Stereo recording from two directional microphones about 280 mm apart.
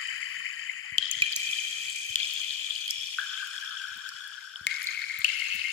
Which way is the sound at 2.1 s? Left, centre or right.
Left.